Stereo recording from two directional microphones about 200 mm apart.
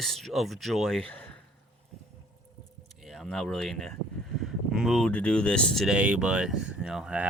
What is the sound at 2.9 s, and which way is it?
Speech, centre (ahead or behind).